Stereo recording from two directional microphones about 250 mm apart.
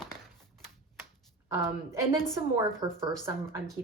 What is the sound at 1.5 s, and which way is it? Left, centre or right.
A woman's voice, centre.